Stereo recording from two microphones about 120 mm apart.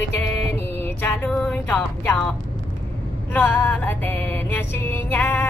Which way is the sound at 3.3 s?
15° left (ahead or behind).